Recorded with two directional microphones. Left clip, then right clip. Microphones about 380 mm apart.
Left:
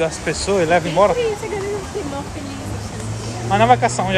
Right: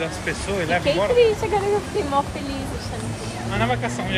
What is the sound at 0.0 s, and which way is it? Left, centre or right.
Speech, centre.